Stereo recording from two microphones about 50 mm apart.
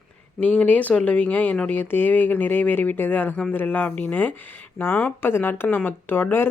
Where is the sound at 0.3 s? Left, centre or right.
Left.